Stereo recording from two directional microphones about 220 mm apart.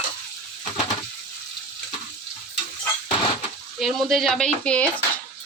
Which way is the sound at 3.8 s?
Centre (ahead or behind).